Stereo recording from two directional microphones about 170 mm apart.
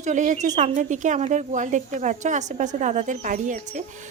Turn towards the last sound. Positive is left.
turn(degrees=-45)  # may be behind; listen again after turning